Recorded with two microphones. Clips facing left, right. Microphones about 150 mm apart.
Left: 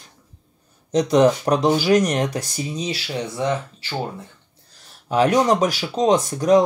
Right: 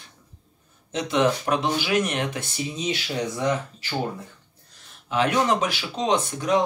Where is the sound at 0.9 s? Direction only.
40° left (ahead or behind).